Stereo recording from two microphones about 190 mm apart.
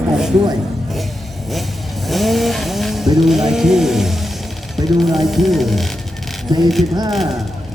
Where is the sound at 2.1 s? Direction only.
Centre (ahead or behind).